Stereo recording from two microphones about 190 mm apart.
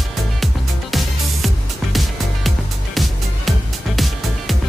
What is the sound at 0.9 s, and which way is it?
Music, centre (ahead or behind).